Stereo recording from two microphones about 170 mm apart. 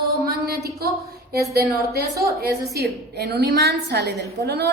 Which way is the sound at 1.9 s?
70° right (ahead or behind).